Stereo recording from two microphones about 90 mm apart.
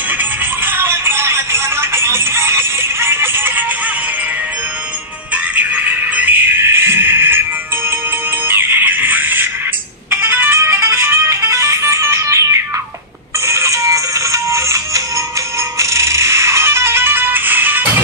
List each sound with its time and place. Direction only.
0.2 s music: 25° right (ahead or behind)
5.3 s music: 20° right (ahead or behind)
8.5 s music: 25° right (ahead or behind)